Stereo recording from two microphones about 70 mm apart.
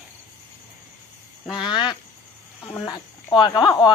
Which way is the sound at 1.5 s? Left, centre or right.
Left.